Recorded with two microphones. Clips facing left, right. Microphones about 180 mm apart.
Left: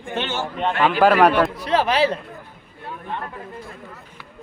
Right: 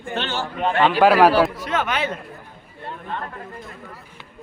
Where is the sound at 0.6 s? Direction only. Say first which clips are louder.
Right 1 dB; centre (ahead or behind).